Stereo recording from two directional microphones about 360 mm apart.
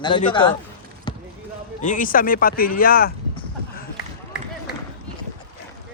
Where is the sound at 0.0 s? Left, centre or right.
Centre.